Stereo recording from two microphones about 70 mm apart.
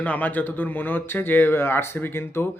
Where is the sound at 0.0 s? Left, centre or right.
Left.